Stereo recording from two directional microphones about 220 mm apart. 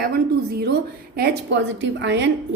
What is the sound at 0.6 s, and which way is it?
A woman's voice, 45° right (ahead or behind).